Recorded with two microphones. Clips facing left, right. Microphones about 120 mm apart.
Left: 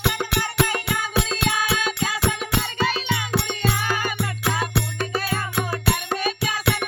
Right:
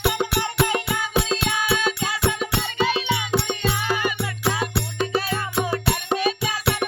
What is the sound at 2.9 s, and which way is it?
Music, 20° right (ahead or behind).